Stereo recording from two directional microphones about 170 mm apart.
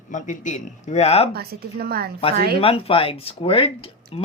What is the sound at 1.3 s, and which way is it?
A woman's voice, 65° right (ahead or behind).